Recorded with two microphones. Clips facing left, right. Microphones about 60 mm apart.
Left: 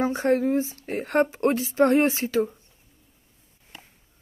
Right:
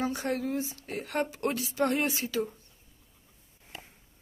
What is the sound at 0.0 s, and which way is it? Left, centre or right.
A woman's voice, left.